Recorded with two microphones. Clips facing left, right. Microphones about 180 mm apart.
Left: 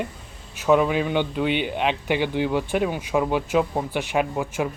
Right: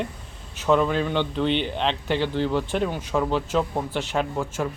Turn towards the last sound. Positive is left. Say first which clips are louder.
# left 2 dB
turn(degrees=10)  # may be behind; listen again after turning